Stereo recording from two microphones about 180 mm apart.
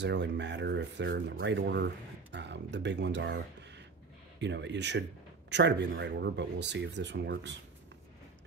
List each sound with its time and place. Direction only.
0.0 s speech: 75° right (ahead or behind)